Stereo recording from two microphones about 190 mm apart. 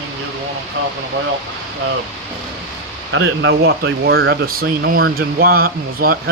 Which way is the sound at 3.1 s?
90° right.